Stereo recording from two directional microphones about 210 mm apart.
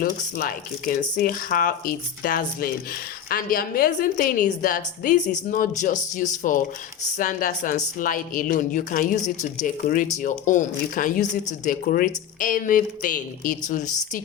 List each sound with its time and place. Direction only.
0.0 s speech: 40° left (ahead or behind)